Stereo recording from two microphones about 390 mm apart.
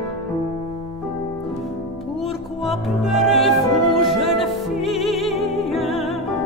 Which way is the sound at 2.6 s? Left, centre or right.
Centre.